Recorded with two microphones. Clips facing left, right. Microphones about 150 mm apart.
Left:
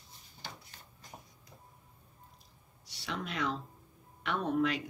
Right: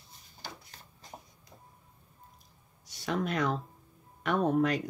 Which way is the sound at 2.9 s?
45° right (ahead or behind).